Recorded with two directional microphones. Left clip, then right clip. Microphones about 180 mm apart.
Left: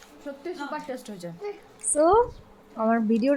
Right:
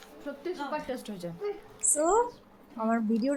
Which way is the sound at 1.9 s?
20° left (ahead or behind).